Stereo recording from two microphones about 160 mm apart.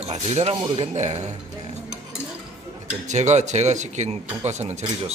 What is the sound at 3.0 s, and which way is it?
Speech, 45° right (ahead or behind).